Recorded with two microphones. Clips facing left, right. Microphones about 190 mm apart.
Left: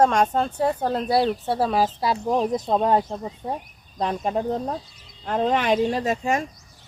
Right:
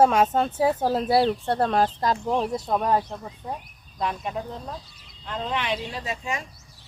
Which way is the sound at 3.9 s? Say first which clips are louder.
Left 5 dB; 40° left (ahead or behind).